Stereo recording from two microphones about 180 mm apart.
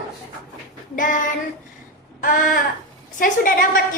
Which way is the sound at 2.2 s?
50° left (ahead or behind).